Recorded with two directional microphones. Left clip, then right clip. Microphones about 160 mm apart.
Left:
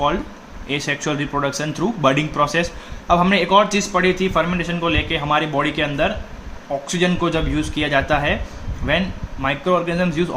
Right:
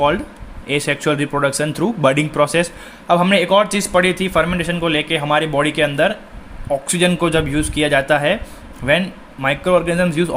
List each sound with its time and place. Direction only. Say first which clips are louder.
0.7 s speech: right 4 dB; 45° right (ahead or behind)